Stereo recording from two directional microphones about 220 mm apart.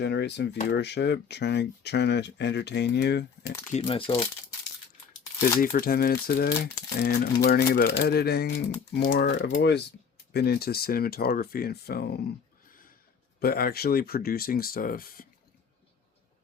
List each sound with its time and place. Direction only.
0.0 s speech: 50° left (ahead or behind)
3.7 s speech: 30° left (ahead or behind)
5.5 s speech: 40° left (ahead or behind)
13.4 s speech: 45° left (ahead or behind)